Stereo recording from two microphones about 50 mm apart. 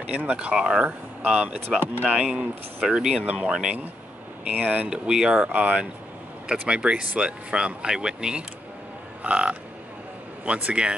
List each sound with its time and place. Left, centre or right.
0.1 s speech: right
2.0 s speech: centre
2.3 s speech: right
4.8 s speech: centre